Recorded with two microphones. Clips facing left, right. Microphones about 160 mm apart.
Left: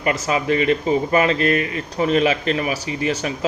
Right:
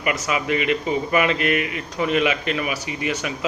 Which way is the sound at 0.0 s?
35° left (ahead or behind).